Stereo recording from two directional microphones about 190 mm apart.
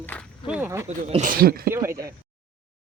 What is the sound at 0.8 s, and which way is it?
Speech, 35° right (ahead or behind).